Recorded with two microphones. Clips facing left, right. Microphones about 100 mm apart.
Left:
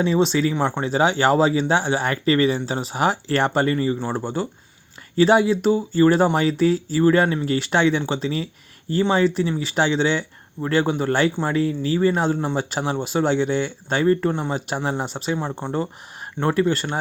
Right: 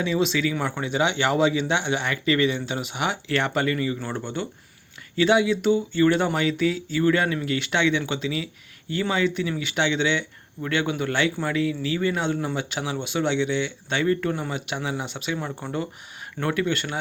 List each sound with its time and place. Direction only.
0.0 s speech: 35° left (ahead or behind)
0.5 s speech: 25° left (ahead or behind)
0.8 s speech: 35° left (ahead or behind)